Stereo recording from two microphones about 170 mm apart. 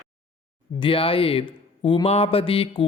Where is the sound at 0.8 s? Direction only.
30° left (ahead or behind).